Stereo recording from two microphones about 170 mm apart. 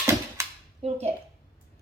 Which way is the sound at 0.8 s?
40° right (ahead or behind).